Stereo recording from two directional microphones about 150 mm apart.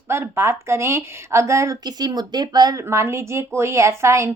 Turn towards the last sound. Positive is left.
turn(degrees=-20)  # may be behind; listen again after turning